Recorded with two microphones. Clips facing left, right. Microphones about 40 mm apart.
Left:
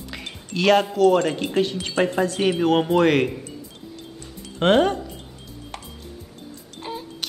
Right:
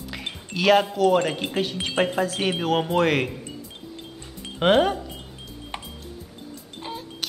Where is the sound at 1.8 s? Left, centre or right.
Centre.